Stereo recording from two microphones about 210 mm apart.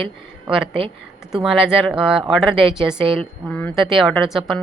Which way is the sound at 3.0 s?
25° right (ahead or behind).